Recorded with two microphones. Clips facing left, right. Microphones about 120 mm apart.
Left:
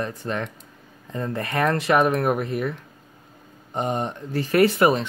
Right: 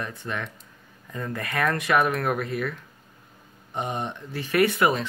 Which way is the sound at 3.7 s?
40° left (ahead or behind).